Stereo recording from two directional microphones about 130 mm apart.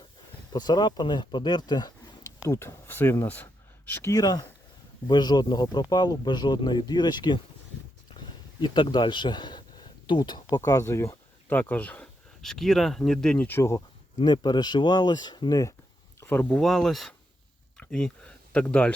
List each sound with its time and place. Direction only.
0.5 s speech: 30° left (ahead or behind)
8.6 s speech: 35° left (ahead or behind)
10.7 s speech: 25° left (ahead or behind)
13.6 s speech: 25° left (ahead or behind)
14.3 s speech: 35° left (ahead or behind)
16.2 s speech: 15° left (ahead or behind)
16.6 s speech: 5° left (ahead or behind)